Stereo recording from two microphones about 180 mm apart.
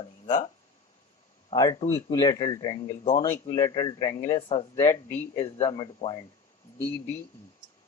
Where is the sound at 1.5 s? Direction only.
25° left (ahead or behind).